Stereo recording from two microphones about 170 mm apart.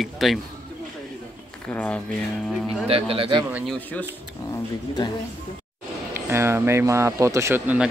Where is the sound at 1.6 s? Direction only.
10° left (ahead or behind).